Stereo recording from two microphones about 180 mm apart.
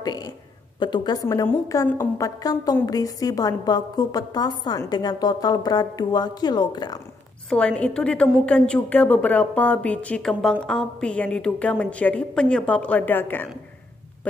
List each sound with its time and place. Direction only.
0.0 s a sound: 20° left (ahead or behind)
0.7 s a woman's voice: 25° left (ahead or behind)
7.4 s a woman's voice: 5° left (ahead or behind)